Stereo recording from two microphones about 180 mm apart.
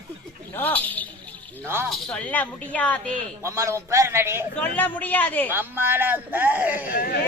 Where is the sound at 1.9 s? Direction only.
5° left (ahead or behind).